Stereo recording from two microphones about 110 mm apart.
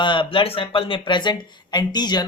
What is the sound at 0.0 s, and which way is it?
Speech, 50° left (ahead or behind).